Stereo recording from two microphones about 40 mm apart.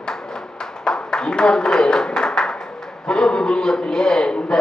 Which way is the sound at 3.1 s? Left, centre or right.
Centre.